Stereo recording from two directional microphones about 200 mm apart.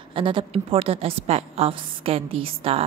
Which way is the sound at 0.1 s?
25° right (ahead or behind).